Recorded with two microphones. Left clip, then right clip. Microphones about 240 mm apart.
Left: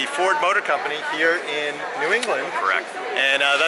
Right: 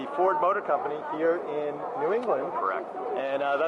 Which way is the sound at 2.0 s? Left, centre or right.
Centre.